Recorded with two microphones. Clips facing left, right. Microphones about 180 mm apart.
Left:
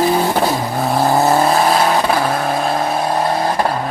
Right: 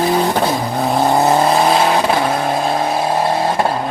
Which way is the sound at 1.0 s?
Centre (ahead or behind).